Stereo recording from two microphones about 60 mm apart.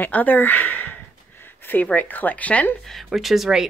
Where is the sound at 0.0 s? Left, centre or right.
Left.